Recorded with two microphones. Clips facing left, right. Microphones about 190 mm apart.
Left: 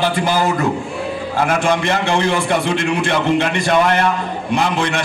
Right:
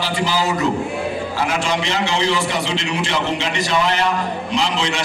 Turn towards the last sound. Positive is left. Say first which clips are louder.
# left 3 dB
turn(degrees=55)  # may be behind; listen again after turning